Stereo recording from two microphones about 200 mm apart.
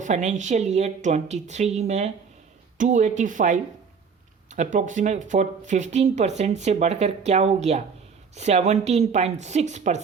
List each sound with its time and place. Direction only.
0.0 s speech: 35° right (ahead or behind)